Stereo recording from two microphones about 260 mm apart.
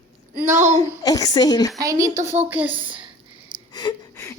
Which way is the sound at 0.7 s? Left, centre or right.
Centre.